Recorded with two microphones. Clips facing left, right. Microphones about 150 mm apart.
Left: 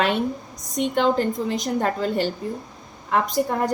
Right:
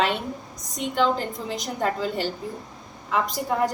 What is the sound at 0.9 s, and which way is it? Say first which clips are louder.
A woman's voice: left 2 dB; 50° left (ahead or behind).